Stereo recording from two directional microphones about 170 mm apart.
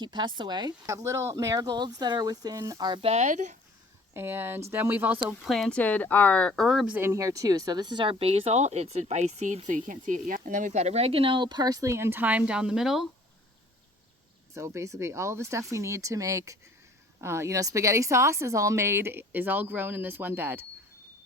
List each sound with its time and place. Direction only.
0.0 s speech: 25° right (ahead or behind); by 3.6 s 45° right (ahead or behind)
4.1 s a woman's voice: 15° right (ahead or behind)
14.5 s a woman's voice: 15° right (ahead or behind)